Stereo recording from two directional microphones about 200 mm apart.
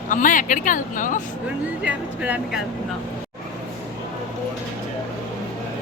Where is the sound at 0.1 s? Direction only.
40° left (ahead or behind).